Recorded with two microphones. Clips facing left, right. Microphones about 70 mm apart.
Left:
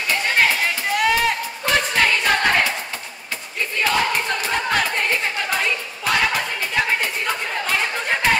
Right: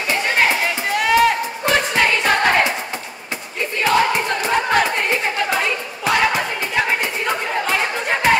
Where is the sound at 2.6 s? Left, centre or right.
Right.